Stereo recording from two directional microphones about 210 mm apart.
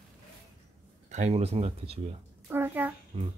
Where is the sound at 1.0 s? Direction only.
30° right (ahead or behind).